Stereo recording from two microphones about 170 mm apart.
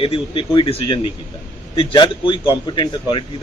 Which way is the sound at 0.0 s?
30° left (ahead or behind).